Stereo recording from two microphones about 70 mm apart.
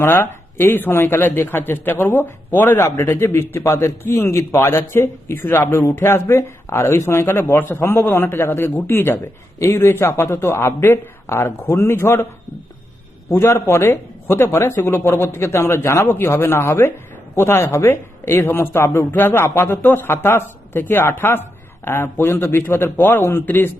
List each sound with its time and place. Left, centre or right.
0.0 s speech: left
13.3 s speech: left